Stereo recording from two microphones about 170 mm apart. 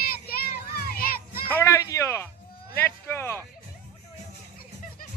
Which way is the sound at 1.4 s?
15° left (ahead or behind).